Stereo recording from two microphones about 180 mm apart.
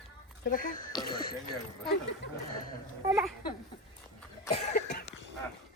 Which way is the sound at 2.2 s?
75° left (ahead or behind).